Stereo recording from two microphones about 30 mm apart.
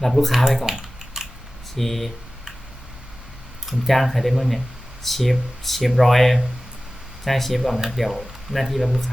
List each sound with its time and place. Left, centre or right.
0.0 s speech: centre
0.6 s typing: centre
1.7 s speech: centre
3.8 s speech: centre